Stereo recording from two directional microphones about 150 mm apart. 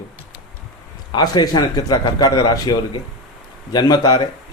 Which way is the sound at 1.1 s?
30° left (ahead or behind).